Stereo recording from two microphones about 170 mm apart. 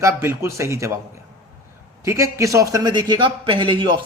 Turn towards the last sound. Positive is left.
turn(degrees=-25)  # may be behind; listen again after turning